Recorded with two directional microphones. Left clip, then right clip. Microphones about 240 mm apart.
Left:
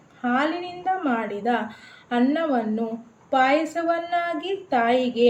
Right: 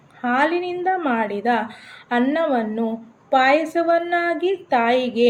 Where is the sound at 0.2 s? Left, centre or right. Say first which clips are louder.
Right 4 dB; right.